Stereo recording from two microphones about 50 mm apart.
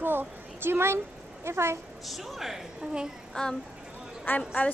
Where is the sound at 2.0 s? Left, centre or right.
Centre.